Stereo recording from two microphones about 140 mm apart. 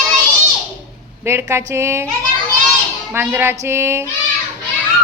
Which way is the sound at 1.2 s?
20° right (ahead or behind).